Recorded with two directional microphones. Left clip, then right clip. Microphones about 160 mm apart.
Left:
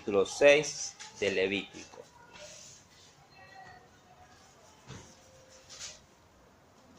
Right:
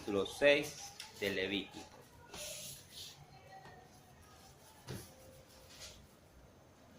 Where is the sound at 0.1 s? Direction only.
25° left (ahead or behind).